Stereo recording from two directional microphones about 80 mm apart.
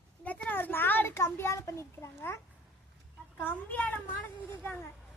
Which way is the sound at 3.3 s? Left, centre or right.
Left.